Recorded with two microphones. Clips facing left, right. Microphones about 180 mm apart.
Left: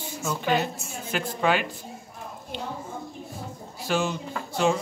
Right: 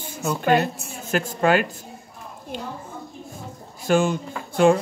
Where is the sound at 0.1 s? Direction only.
55° right (ahead or behind).